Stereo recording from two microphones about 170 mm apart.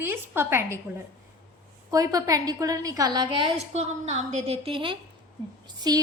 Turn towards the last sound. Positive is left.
turn(degrees=-25)  # may be behind; listen again after turning